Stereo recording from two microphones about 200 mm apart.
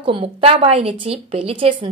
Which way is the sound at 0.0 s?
25° right (ahead or behind).